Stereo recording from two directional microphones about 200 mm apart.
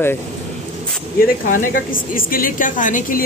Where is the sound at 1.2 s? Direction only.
45° left (ahead or behind).